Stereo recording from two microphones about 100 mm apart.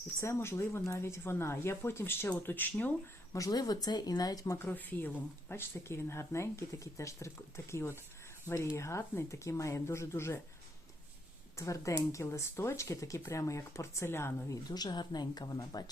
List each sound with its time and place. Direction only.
0.2 s speech: 25° left (ahead or behind)
3.3 s speech: 35° left (ahead or behind)
4.6 s speech: 15° left (ahead or behind)
11.5 s speech: 30° left (ahead or behind)
14.7 s speech: 45° left (ahead or behind)